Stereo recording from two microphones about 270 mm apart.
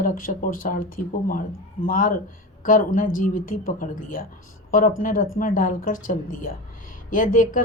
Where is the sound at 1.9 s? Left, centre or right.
Left.